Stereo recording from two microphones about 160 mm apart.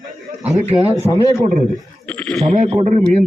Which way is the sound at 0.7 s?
25° right (ahead or behind).